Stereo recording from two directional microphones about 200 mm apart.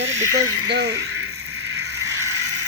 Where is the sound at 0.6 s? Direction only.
75° right (ahead or behind); by 1.8 s 90° right.